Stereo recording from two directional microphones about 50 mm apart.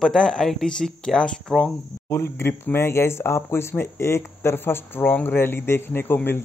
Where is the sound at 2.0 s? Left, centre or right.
Left.